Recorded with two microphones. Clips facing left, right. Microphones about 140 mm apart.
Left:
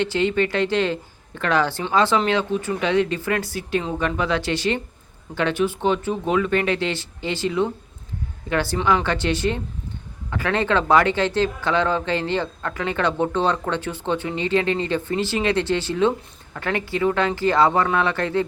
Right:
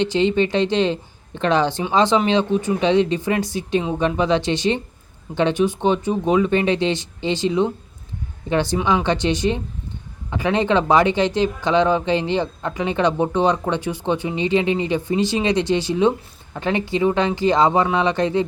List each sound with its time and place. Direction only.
0.0 s speech: 20° right (ahead or behind)